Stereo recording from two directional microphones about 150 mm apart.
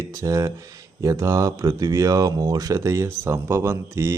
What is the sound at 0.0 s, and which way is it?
Speech, 20° right (ahead or behind).